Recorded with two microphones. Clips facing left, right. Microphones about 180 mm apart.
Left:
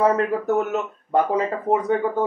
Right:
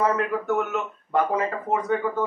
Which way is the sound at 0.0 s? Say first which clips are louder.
Left 4 dB; 35° left (ahead or behind).